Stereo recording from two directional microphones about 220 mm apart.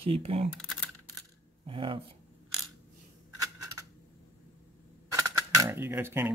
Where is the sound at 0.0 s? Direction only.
25° right (ahead or behind).